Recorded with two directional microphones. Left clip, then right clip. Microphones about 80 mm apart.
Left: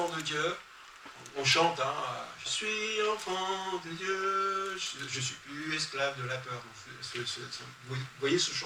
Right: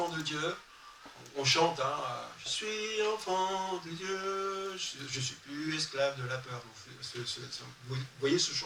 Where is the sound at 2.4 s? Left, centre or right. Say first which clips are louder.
Left 3 dB; right.